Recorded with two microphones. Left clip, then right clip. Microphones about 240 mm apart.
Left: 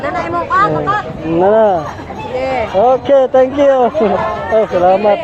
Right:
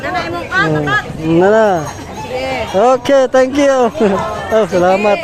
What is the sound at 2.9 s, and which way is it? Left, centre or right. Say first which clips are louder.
Speech: left 1 dB; right.